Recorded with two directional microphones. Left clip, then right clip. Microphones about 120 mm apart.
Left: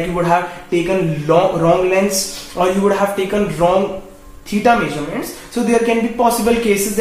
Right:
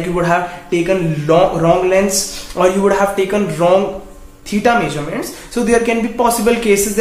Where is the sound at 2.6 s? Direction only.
15° right (ahead or behind).